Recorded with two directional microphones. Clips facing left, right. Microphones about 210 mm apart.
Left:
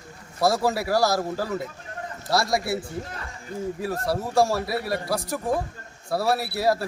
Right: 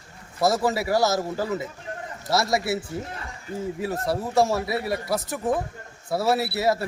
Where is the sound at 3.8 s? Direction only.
20° right (ahead or behind).